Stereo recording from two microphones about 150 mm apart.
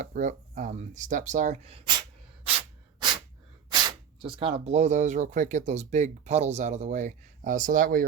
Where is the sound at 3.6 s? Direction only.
35° right (ahead or behind).